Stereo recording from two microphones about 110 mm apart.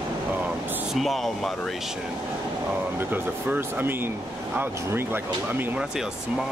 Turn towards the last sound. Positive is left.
turn(degrees=-20)  # may be behind; listen again after turning